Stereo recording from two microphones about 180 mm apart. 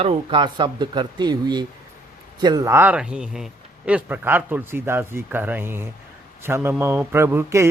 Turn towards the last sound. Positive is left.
turn(degrees=-15)  # may be behind; listen again after turning